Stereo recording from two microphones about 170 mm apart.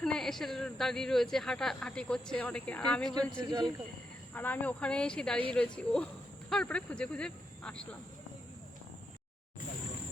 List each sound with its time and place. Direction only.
0.0 s a woman's voice: 5° left (ahead or behind)
3.1 s speech: 25° right (ahead or behind)
4.4 s a woman's voice: 10° left (ahead or behind)